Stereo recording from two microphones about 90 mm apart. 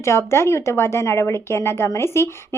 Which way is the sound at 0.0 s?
30° left (ahead or behind).